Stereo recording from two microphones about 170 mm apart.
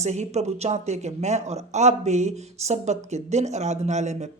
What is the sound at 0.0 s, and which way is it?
Speech, 40° right (ahead or behind).